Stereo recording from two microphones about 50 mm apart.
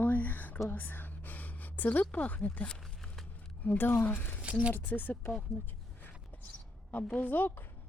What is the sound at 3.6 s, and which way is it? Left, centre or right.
Speech, left.